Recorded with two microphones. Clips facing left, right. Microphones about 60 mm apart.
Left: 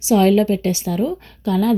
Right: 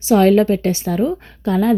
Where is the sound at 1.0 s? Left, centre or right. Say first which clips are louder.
Right 2 dB; right.